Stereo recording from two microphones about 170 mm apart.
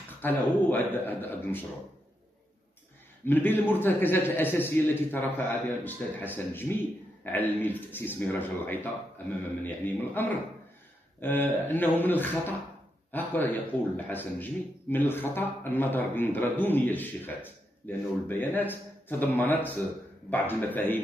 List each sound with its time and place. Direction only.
0.2 s a man's voice: 10° left (ahead or behind)
3.3 s a man's voice: 10° left (ahead or behind)